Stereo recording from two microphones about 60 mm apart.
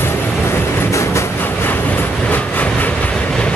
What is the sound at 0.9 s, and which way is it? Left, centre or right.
Train, left.